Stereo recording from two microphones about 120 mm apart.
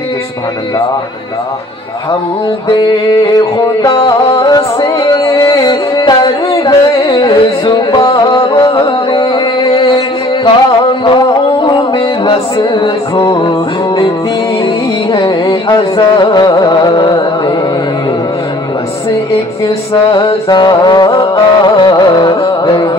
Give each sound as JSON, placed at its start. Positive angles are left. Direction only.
{"t": 3.2, "sound": "music", "side_deg": 35}
{"t": 5.4, "sound": "carnatic music", "side_deg": 30}
{"t": 5.7, "sound": "music", "side_deg": 35}
{"t": 11.1, "sound": "a sound", "side_deg": 40}
{"t": 12.5, "sound": "music", "side_deg": 35}
{"t": 15.1, "sound": "music", "side_deg": 40}
{"t": 20.1, "sound": "music", "side_deg": 40}